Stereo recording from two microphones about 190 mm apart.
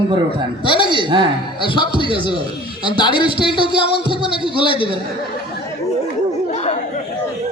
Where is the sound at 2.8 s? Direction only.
25° left (ahead or behind).